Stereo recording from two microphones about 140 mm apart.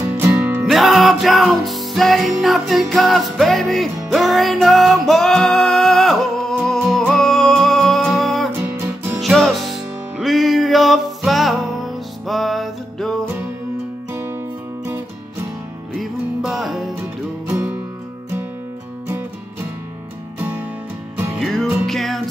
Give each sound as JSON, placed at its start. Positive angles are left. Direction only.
{"t": 0.0, "sound": "music", "side_deg": -15}
{"t": 0.7, "sound": "music", "side_deg": 0}
{"t": 8.5, "sound": "music", "side_deg": -15}
{"t": 9.2, "sound": "music", "side_deg": 0}
{"t": 16.0, "sound": "music", "side_deg": 0}
{"t": 17.5, "sound": "music", "side_deg": -20}
{"t": 21.4, "sound": "music", "side_deg": 0}